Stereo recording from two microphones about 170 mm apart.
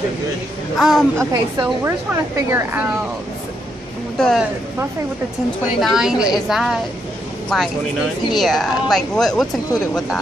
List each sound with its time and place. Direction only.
0.7 s a woman's voice: centre (ahead or behind)
1.1 s speech: 20° right (ahead or behind)
4.2 s a woman's voice: centre (ahead or behind)
5.8 s a woman's voice: centre (ahead or behind)